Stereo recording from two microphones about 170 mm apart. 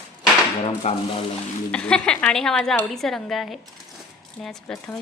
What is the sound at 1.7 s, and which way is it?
Speech, 5° left (ahead or behind).